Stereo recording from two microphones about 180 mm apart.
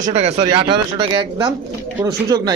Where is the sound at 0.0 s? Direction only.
40° right (ahead or behind).